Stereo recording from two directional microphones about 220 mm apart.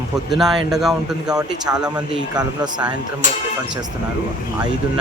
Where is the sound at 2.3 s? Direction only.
20° right (ahead or behind).